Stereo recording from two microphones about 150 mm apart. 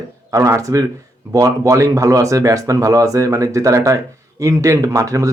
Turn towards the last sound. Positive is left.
turn(degrees=-20)  # may be behind; listen again after turning